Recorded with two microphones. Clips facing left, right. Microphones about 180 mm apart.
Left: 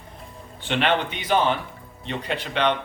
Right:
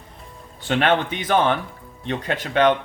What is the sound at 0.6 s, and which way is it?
Speech, 50° right (ahead or behind).